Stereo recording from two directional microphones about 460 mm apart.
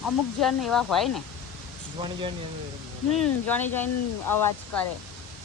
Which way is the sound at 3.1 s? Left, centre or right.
Centre.